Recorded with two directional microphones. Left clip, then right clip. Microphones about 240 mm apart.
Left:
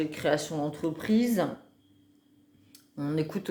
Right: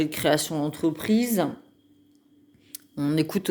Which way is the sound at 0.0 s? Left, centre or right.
Right.